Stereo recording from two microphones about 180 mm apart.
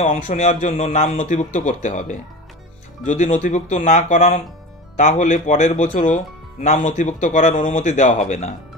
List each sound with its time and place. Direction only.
0.0 s speech: 40° left (ahead or behind)